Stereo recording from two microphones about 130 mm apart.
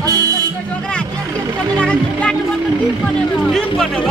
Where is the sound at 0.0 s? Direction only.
30° right (ahead or behind).